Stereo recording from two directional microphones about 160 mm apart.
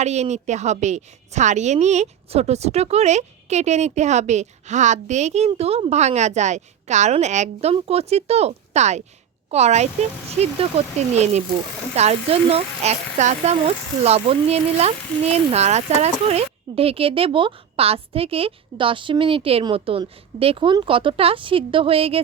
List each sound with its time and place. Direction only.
0.0 s a woman's voice: 45° right (ahead or behind)